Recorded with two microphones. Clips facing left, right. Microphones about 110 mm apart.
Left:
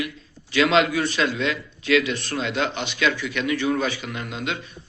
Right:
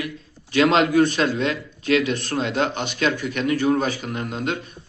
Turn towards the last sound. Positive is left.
turn(degrees=-45)  # may be behind; listen again after turning